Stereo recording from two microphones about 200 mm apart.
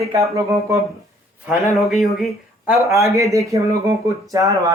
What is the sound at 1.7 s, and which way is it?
Speech, centre (ahead or behind).